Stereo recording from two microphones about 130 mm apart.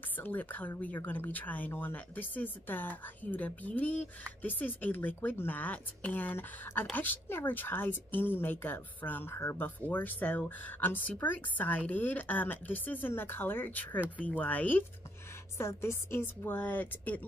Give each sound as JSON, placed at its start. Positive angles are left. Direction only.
{"t": 0.2, "sound": "speech", "side_deg": 15}